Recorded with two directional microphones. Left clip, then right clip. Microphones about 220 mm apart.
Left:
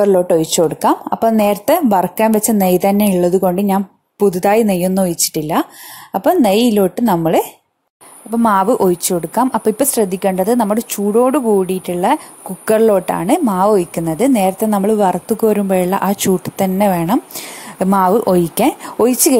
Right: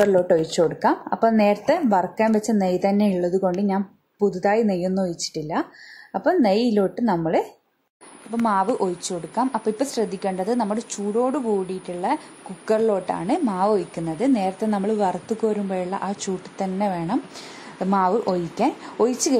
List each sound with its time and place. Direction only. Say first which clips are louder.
0.0 s a woman's voice: left 6 dB; 30° left (ahead or behind)